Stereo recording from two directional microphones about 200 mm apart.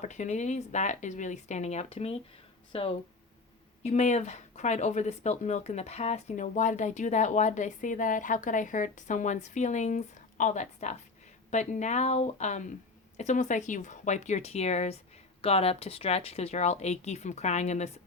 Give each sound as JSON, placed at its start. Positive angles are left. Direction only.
{"t": 0.0, "sound": "speech", "side_deg": 35}